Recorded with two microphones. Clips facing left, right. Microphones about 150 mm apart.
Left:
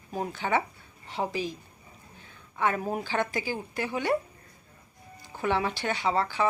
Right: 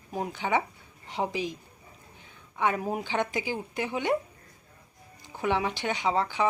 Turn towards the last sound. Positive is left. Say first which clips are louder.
# even
turn(degrees=-15)  # may be behind; listen again after turning